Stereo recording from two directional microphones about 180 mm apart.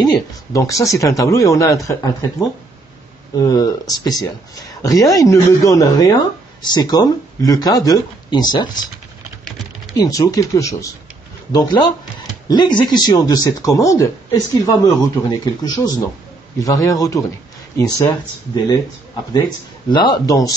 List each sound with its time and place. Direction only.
0.0 s speech: 20° left (ahead or behind)
9.9 s speech: 20° left (ahead or behind)
19.9 s speech: 25° left (ahead or behind)